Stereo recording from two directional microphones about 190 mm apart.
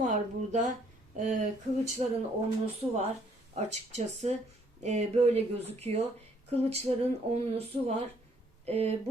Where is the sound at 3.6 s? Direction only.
35° right (ahead or behind).